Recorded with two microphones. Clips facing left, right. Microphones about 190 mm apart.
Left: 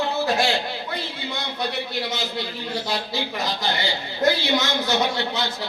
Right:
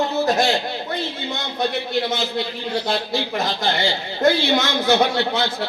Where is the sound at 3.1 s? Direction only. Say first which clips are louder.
Right 4 dB; 50° right (ahead or behind).